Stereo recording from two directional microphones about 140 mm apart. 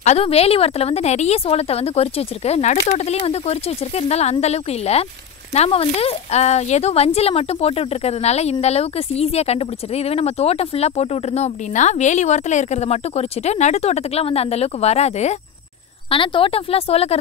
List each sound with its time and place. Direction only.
0.0 s speech: 50° left (ahead or behind)
16.1 s speech: 40° left (ahead or behind)